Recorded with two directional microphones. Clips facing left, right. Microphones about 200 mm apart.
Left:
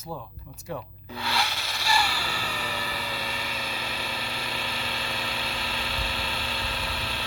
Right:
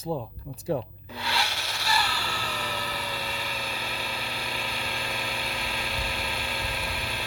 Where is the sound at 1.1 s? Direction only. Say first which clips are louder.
Left 1 dB; 10° right (ahead or behind).